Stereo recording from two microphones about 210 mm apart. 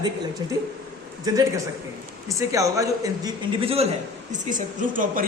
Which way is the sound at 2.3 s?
15° right (ahead or behind).